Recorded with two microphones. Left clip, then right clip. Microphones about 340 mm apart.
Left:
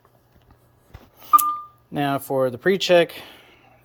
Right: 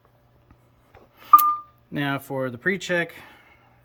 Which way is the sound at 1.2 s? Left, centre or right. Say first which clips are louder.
Right 2 dB; centre.